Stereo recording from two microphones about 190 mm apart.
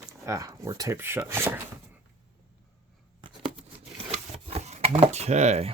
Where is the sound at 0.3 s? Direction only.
15° right (ahead or behind).